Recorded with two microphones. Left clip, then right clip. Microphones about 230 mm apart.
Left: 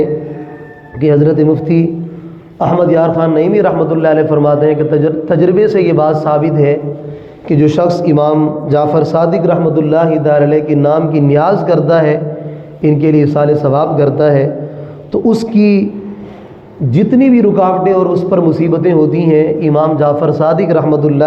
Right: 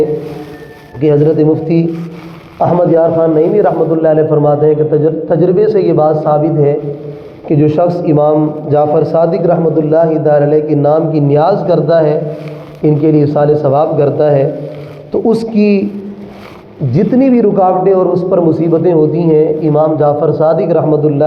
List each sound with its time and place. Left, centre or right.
0.9 s a man's voice: left
16.9 s a man's voice: left